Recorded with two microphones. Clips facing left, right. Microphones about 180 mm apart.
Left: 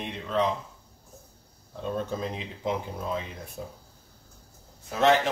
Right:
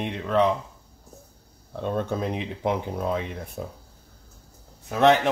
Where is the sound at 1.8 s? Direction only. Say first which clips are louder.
Right 4 dB; 60° right (ahead or behind).